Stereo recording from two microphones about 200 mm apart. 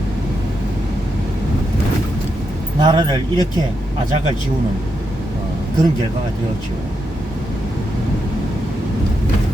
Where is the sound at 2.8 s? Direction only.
25° right (ahead or behind).